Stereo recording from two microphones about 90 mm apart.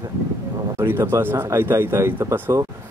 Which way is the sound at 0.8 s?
25° right (ahead or behind).